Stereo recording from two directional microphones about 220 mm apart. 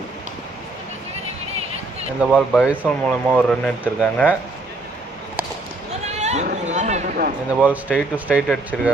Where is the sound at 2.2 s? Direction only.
Centre (ahead or behind).